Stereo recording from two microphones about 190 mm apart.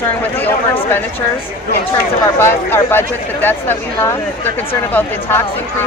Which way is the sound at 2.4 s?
10° left (ahead or behind).